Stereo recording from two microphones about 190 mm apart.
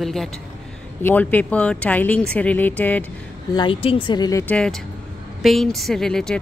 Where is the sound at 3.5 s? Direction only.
25° left (ahead or behind).